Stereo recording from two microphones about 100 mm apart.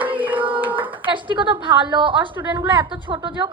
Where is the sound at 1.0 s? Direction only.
55° right (ahead or behind).